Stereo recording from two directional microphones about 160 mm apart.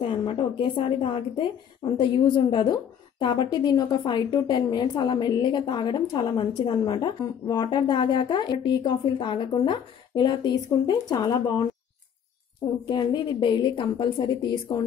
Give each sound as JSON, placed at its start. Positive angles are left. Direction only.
{"t": 0.0, "sound": "a woman's voice", "side_deg": 30}
{"t": 12.8, "sound": "a woman's voice", "side_deg": 30}